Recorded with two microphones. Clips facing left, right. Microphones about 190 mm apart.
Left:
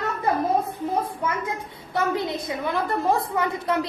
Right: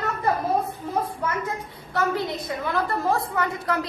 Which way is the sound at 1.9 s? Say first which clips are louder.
Left 1 dB; 20° left (ahead or behind).